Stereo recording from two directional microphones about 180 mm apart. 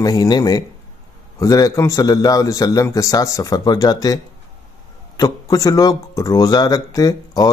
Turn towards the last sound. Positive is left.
turn(degrees=20)  # may be behind; listen again after turning